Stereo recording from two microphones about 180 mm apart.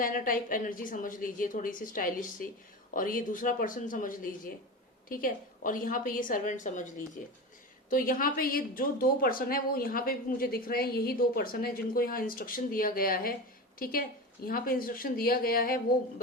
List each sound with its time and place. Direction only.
0.0 s speech: 50° left (ahead or behind)
7.9 s speech: 50° left (ahead or behind)